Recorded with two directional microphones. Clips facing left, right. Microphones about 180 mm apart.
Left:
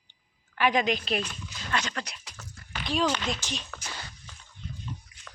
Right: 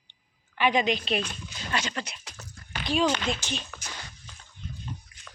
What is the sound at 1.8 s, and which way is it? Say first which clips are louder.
A woman's voice: right 1 dB; 5° right (ahead or behind).